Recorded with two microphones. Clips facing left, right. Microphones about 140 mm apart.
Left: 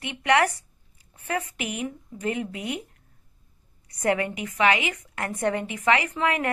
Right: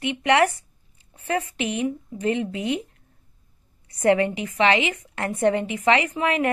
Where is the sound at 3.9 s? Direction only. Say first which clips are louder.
Right 5 dB; 25° right (ahead or behind).